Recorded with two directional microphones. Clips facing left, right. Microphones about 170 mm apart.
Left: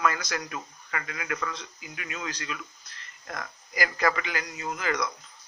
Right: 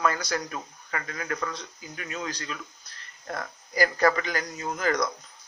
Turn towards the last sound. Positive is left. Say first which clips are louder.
# right 3 dB
turn(degrees=-40)  # may be behind; listen again after turning